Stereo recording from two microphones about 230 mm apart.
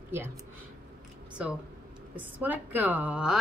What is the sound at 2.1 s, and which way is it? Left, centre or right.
Speech, centre.